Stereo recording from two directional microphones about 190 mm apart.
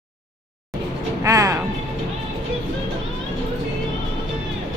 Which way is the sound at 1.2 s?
15° right (ahead or behind).